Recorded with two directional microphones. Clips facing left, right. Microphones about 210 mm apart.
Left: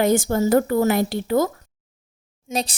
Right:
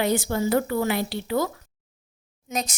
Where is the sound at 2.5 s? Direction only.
30° left (ahead or behind).